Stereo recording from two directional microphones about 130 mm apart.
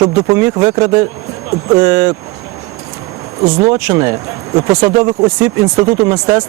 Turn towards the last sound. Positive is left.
turn(degrees=-25)  # may be behind; listen again after turning